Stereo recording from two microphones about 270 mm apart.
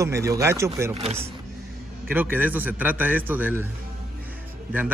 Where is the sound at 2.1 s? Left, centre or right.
Centre.